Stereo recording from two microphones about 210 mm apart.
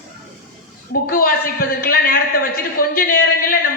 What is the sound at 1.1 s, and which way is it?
A man's voice, 45° left (ahead or behind).